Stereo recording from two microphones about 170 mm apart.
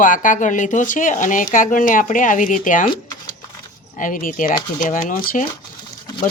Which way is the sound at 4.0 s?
55° left (ahead or behind).